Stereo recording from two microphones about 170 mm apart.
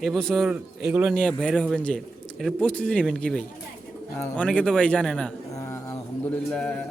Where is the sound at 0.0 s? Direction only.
Centre (ahead or behind).